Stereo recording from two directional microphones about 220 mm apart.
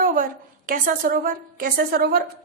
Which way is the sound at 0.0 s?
40° right (ahead or behind).